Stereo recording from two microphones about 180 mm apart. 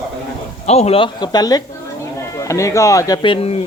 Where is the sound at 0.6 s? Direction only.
35° left (ahead or behind).